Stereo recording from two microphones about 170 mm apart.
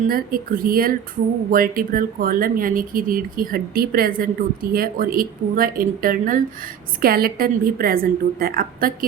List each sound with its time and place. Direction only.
0.1 s speech: 60° right (ahead or behind)